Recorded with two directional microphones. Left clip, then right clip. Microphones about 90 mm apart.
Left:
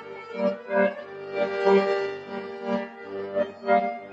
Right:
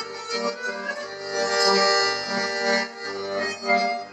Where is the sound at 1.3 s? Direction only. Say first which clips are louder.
Right 1 dB; 25° left (ahead or behind).